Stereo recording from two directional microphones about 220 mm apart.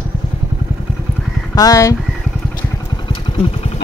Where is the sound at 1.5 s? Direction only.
15° left (ahead or behind).